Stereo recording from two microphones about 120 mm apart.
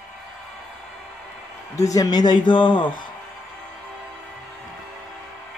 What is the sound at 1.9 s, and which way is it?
Speech, 35° left (ahead or behind).